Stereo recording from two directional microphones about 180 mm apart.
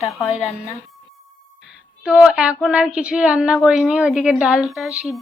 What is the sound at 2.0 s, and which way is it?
A woman's voice, 5° right (ahead or behind).